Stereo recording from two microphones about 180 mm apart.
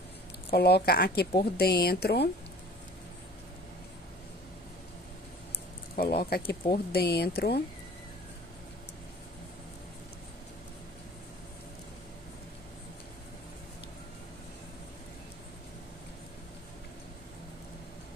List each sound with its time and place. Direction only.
0.5 s speech: 65° left (ahead or behind)
5.9 s speech: 60° left (ahead or behind)